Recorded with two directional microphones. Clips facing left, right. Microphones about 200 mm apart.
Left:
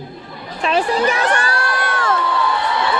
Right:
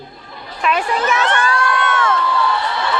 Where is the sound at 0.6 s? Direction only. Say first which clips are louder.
Left 1 dB; 30° left (ahead or behind).